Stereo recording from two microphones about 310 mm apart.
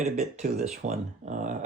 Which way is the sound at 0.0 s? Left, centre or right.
Right.